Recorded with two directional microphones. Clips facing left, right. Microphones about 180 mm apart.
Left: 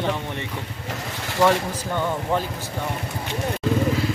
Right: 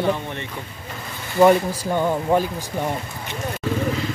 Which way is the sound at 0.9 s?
80° left.